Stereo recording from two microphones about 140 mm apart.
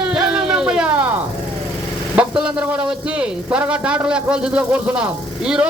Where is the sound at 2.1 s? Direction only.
10° right (ahead or behind).